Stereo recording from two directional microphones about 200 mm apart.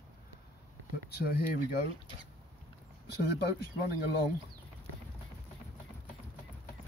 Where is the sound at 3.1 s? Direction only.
55° left (ahead or behind).